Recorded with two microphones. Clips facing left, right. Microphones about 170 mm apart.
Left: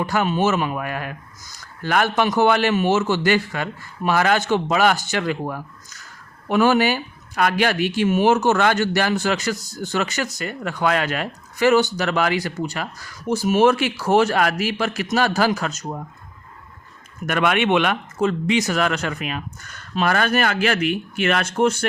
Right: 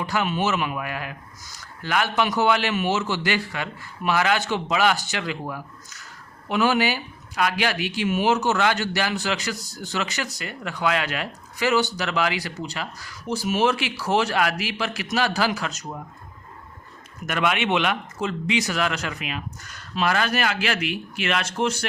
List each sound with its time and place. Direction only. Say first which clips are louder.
0.0 s speech: left 4 dB; 45° left (ahead or behind)
17.2 s speech: left 4 dB; 55° left (ahead or behind)